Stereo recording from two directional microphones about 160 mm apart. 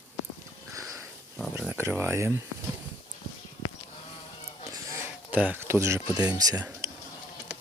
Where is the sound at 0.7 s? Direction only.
20° right (ahead or behind).